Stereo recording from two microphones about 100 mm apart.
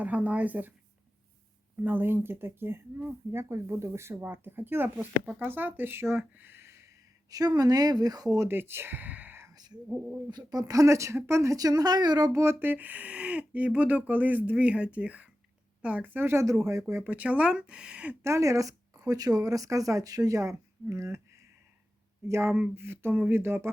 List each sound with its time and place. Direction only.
0.0 s speech: 15° right (ahead or behind)
1.8 s speech: 20° right (ahead or behind); by 8.4 s 35° right (ahead or behind)
8.4 s speech: 20° right (ahead or behind)
10.2 s speech: 45° right (ahead or behind)
12.4 s speech: 25° right (ahead or behind)
18.2 s speech: 30° right (ahead or behind)
22.3 s speech: 25° right (ahead or behind)